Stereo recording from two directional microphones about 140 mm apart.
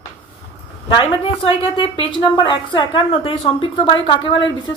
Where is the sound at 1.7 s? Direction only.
35° left (ahead or behind).